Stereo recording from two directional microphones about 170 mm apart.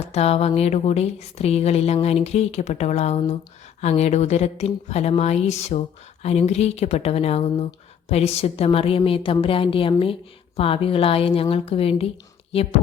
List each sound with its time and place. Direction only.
0.0 s speech: 40° left (ahead or behind)